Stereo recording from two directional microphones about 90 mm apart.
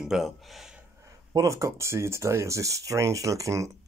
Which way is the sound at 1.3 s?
35° right (ahead or behind).